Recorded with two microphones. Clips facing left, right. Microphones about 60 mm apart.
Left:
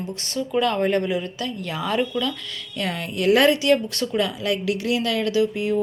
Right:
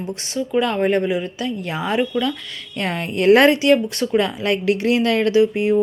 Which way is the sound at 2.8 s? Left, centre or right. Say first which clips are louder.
Right 4 dB; right.